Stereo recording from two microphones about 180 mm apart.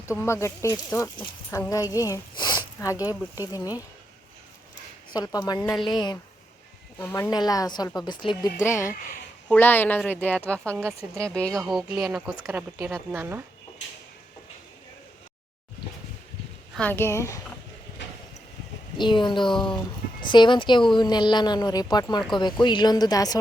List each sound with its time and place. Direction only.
0.1 s speech: 15° left (ahead or behind)
5.1 s speech: 20° left (ahead or behind)
8.6 s speech: 15° left (ahead or behind)
10.8 s speech: 15° right (ahead or behind)
11.3 s speech: 5° left (ahead or behind); by 13.4 s 10° right (ahead or behind)
16.7 s speech: 10° left (ahead or behind)
18.0 s a sound: 90° left
18.9 s speech: 25° left (ahead or behind)